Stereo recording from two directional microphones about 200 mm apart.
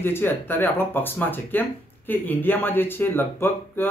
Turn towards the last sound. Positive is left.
turn(degrees=10)  # may be behind; listen again after turning